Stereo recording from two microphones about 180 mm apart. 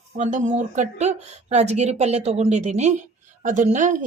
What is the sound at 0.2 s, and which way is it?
Speech, 40° right (ahead or behind).